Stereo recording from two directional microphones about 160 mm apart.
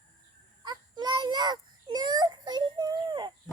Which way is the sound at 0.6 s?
25° right (ahead or behind).